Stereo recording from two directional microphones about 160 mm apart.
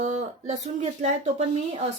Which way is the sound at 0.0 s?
45° right (ahead or behind).